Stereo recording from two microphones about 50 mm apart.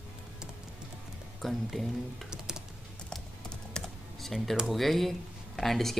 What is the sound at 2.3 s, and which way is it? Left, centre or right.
Typing, centre.